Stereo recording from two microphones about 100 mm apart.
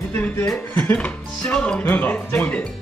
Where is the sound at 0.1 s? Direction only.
20° left (ahead or behind).